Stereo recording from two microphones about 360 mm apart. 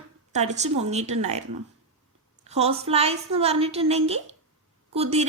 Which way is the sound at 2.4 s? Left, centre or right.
Centre.